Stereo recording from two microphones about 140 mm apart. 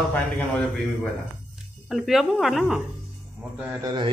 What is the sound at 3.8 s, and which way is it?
Speech, 30° right (ahead or behind).